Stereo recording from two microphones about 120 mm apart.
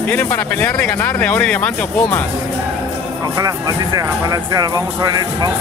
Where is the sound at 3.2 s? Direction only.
25° right (ahead or behind).